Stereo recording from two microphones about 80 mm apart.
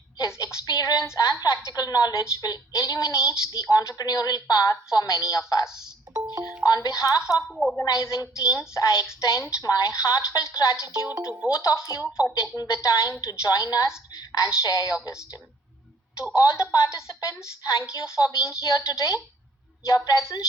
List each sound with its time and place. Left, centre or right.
0.2 s a woman's voice: left
5.6 s speech: centre
6.7 s a woman's voice: left
7.5 s a woman's voice: centre
7.9 s a woman's voice: left
11.3 s speech: centre
11.6 s a woman's voice: left
12.0 s speech: centre
12.5 s a woman's voice: left
16.3 s a woman's voice: left